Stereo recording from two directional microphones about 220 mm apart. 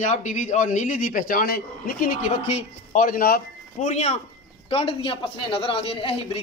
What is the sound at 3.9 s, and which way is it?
A man's voice, 30° left (ahead or behind).